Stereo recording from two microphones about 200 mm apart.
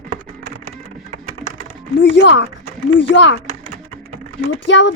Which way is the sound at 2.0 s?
60° left (ahead or behind).